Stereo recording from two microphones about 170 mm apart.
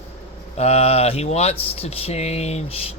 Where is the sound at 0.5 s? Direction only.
40° left (ahead or behind).